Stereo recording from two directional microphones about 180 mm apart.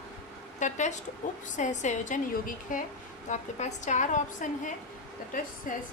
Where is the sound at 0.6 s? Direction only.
40° left (ahead or behind).